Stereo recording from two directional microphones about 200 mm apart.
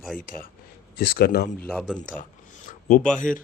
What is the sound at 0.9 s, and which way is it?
Speech, 50° left (ahead or behind).